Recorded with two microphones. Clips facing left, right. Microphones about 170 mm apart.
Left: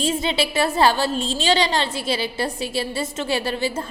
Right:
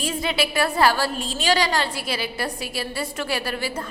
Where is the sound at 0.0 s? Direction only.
25° left (ahead or behind).